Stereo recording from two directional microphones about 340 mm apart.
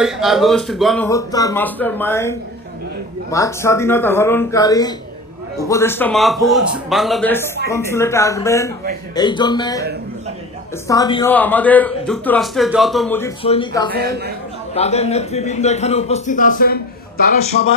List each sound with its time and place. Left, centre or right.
0.0 s a man's voice: centre
10.9 s a man's voice: centre
13.9 s a woman's voice: right
14.7 s a man's voice: centre